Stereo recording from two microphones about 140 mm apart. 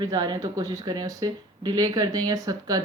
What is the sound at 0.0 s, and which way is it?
Speech, 30° right (ahead or behind).